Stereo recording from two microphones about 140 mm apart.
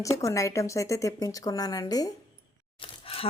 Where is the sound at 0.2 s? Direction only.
20° left (ahead or behind).